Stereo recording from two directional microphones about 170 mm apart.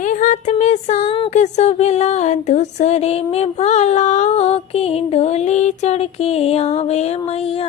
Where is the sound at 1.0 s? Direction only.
30° left (ahead or behind).